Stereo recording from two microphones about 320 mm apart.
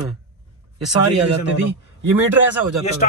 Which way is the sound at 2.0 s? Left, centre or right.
Right.